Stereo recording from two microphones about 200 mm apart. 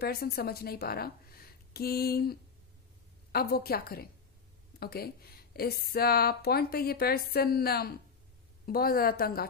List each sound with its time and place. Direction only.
0.0 s a woman's voice: 50° left (ahead or behind)